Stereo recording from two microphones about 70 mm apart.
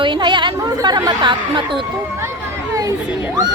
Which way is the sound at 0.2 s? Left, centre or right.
Right.